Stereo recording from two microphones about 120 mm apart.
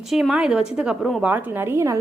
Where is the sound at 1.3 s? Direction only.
15° right (ahead or behind).